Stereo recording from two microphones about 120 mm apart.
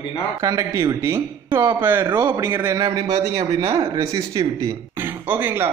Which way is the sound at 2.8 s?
30° right (ahead or behind).